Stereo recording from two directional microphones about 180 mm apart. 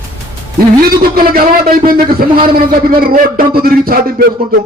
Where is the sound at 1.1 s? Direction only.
55° right (ahead or behind).